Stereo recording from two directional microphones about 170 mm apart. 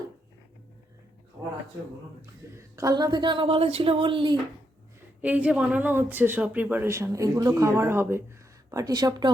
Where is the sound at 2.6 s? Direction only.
20° right (ahead or behind).